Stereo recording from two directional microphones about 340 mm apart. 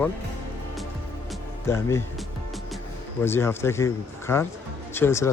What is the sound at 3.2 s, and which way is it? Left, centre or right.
Speech, centre.